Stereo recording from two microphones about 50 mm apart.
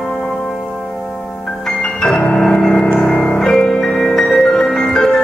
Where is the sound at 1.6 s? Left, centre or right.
Centre.